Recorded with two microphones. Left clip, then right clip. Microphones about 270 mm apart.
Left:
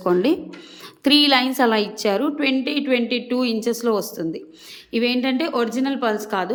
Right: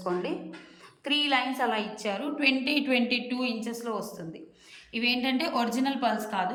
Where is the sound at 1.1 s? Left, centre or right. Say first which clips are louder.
Left 9 dB; left.